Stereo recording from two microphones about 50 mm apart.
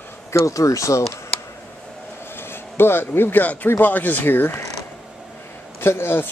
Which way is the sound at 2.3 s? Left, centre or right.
Left.